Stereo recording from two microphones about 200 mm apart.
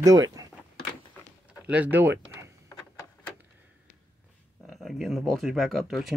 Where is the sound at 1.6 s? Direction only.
10° right (ahead or behind).